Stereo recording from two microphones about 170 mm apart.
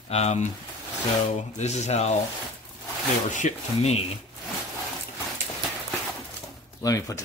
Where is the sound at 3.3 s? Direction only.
45° left (ahead or behind).